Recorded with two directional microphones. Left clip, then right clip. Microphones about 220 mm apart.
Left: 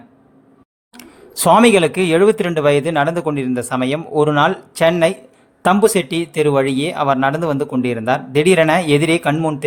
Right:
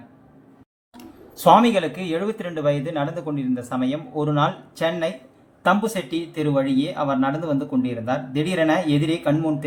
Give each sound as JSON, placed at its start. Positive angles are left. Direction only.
{"t": 1.5, "sound": "speech", "side_deg": 50}